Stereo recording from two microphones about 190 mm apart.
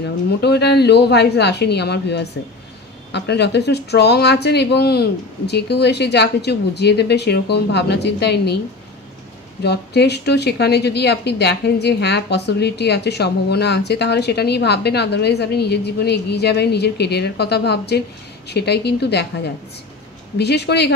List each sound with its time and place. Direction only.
0.4 s a woman's voice: 60° left (ahead or behind)
9.6 s a woman's voice: 60° left (ahead or behind)